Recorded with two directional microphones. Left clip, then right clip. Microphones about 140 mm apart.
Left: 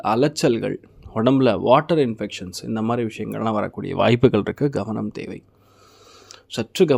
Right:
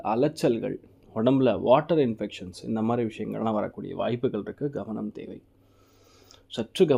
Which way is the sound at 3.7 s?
50° left (ahead or behind).